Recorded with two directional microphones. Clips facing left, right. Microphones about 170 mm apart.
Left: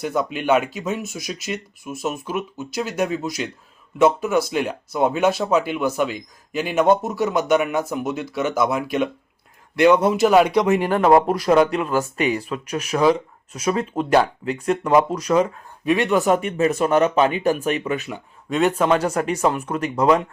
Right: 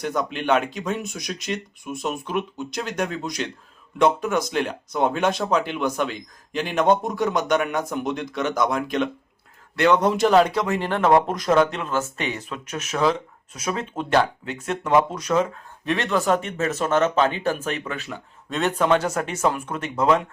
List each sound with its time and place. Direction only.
0.0 s speech: 5° left (ahead or behind)
18.4 s speech: centre (ahead or behind)